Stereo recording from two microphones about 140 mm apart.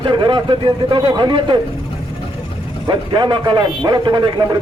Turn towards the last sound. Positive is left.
turn(degrees=-30)  # may be behind; listen again after turning